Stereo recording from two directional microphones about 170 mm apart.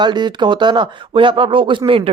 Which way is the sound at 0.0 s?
25° right (ahead or behind).